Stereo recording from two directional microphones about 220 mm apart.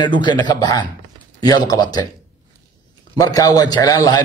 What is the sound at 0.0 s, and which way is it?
A man's voice, 20° left (ahead or behind).